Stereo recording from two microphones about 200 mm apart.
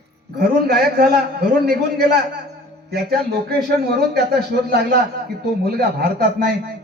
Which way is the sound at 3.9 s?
55° right (ahead or behind).